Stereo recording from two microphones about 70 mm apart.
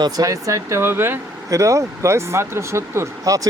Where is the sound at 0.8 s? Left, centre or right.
Right.